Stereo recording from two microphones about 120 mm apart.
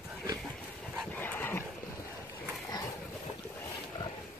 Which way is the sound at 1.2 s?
15° left (ahead or behind).